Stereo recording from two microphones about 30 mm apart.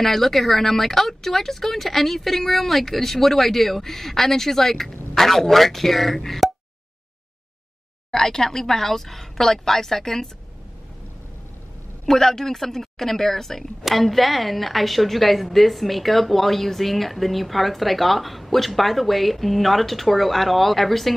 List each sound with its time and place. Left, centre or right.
0.0 s speech: centre
8.1 s speech: centre
12.1 s a woman's voice: centre